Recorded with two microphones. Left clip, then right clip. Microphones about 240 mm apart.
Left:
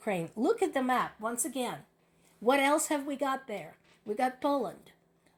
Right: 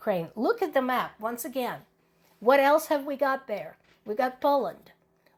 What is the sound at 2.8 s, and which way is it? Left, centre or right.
Speech, right.